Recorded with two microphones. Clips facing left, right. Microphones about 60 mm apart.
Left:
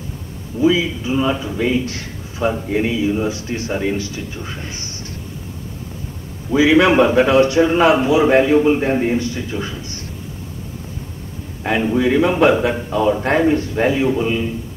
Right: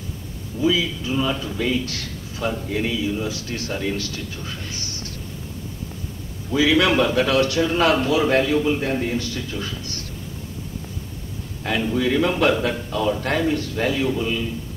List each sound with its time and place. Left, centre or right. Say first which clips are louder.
0.6 s a man's voice: left 5 dB; left
6.5 s a man's voice: left 5 dB; left
11.6 s a man's voice: left 5 dB; left